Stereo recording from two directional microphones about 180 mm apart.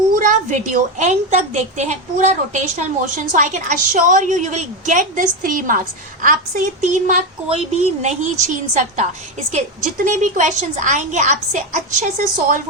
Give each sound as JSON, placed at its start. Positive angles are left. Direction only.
{"t": 0.1, "sound": "a woman's voice", "side_deg": -45}
{"t": 6.8, "sound": "a woman's voice", "side_deg": -45}